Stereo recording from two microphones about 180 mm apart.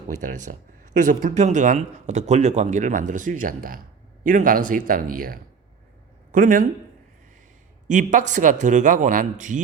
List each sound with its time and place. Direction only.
0.2 s speech: 45° right (ahead or behind)
7.9 s speech: 45° right (ahead or behind)